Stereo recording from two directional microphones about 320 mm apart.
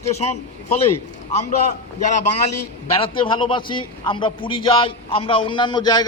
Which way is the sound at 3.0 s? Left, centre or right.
Centre.